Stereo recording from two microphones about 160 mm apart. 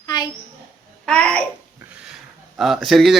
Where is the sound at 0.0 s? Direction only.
25° left (ahead or behind).